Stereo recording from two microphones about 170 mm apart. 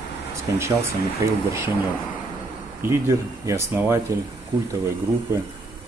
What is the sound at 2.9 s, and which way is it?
Speech, 15° right (ahead or behind).